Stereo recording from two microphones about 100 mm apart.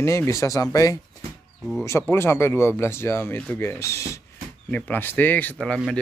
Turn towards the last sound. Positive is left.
turn(degrees=5)  # may be behind; listen again after turning